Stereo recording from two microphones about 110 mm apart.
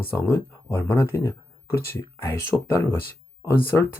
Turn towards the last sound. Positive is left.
turn(degrees=20)  # may be behind; listen again after turning